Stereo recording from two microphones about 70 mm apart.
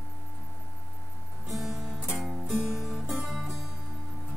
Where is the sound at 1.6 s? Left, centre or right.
Centre.